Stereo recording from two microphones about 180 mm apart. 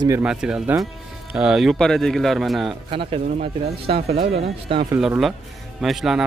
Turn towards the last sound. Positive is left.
turn(degrees=0)  # may be behind; listen again after turning